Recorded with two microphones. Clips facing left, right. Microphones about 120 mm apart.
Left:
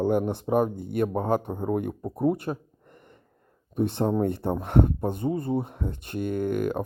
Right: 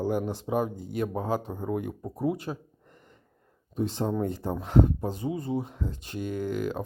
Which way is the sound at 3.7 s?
60° left (ahead or behind).